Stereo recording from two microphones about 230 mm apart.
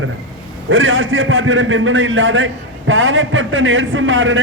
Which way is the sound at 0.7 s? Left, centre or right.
Right.